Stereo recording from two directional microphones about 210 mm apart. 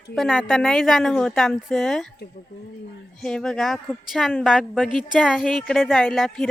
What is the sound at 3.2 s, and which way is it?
A woman's voice, 5° left (ahead or behind).